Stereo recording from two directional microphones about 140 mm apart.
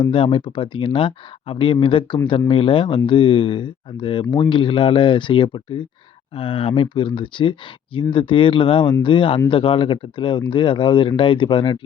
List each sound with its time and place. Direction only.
0.0 s speech: 40° left (ahead or behind)